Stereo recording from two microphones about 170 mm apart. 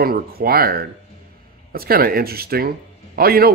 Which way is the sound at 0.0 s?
60° right (ahead or behind).